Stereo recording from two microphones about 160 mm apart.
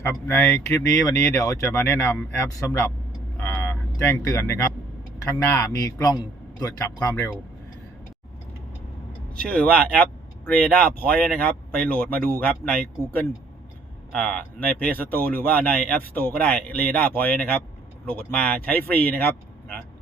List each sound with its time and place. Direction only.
0.0 s speech: 15° left (ahead or behind)
9.4 s speech: 5° left (ahead or behind)